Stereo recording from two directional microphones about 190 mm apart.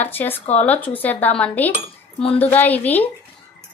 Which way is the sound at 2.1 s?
30° left (ahead or behind).